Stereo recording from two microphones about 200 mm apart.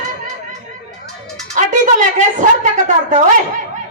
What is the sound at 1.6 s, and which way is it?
Speech, 40° right (ahead or behind).